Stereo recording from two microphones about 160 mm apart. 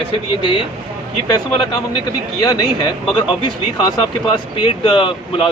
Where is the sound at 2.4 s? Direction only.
25° left (ahead or behind).